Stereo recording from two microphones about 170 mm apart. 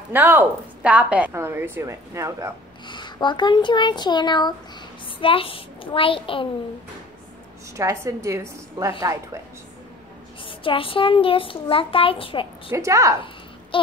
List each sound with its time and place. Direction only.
0.1 s a woman's voice: 10° right (ahead or behind)
2.9 s a child's voice: 25° left (ahead or behind)
7.7 s a woman's voice: 15° right (ahead or behind)
10.4 s a child's voice: 30° left (ahead or behind)
12.7 s a woman's voice: 15° right (ahead or behind)